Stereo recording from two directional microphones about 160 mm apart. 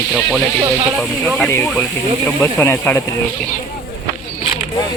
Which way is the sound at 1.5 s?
15° left (ahead or behind).